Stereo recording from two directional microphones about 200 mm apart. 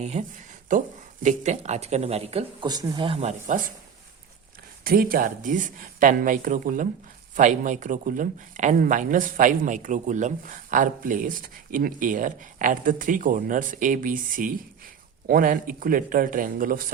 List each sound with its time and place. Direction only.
0.0 s speech: 35° right (ahead or behind)
4.8 s speech: 45° right (ahead or behind)